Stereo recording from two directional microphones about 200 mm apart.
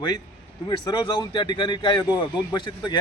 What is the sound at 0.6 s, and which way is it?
A man's voice, 20° left (ahead or behind).